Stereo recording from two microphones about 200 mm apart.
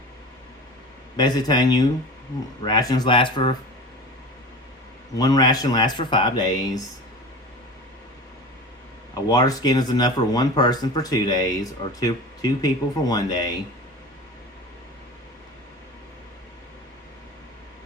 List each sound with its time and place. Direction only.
1.1 s speech: 20° left (ahead or behind)
5.1 s speech: 20° left (ahead or behind)
9.3 s speech: 20° left (ahead or behind)